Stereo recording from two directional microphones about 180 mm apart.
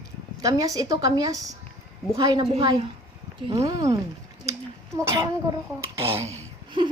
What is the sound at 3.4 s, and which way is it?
Speech, 20° right (ahead or behind).